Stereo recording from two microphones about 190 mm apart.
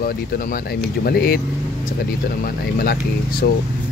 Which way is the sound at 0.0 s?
50° left (ahead or behind).